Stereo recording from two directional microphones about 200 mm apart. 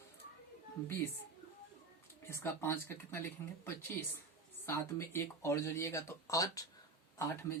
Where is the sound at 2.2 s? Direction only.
15° left (ahead or behind).